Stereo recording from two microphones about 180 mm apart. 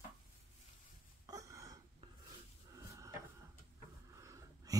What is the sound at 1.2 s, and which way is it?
Gasp, 20° right (ahead or behind).